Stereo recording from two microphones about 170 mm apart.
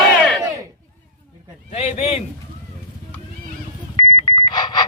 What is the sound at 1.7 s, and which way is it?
Speech, 40° left (ahead or behind).